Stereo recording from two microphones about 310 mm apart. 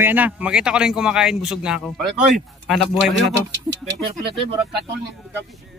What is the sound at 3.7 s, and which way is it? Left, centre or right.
Speech, right.